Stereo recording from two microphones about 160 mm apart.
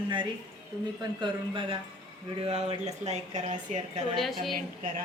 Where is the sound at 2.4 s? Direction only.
40° right (ahead or behind).